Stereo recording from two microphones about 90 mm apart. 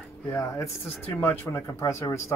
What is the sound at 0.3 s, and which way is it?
Speech, 35° left (ahead or behind).